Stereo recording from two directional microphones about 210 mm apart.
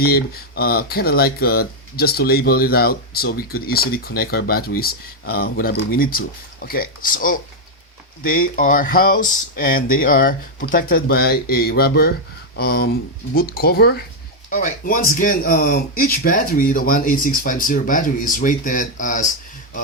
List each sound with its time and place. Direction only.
0.0 s speech: 45° left (ahead or behind)